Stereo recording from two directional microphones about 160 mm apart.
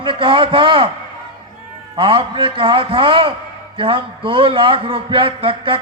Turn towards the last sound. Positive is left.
turn(degrees=-35)  # may be behind; listen again after turning